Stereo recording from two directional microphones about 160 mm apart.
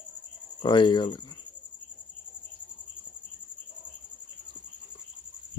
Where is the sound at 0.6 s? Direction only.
30° left (ahead or behind).